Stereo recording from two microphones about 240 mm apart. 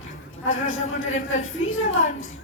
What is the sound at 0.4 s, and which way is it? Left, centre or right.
Speech, left.